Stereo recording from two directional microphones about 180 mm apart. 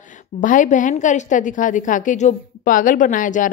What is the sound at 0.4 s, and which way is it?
A woman's voice, 45° left (ahead or behind).